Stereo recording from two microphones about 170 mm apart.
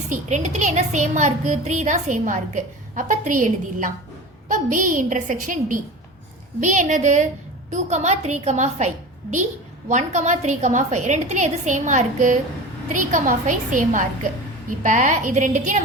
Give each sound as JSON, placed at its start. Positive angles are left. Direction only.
{"t": 0.1, "sound": "speech", "side_deg": -45}
{"t": 9.9, "sound": "speech", "side_deg": -45}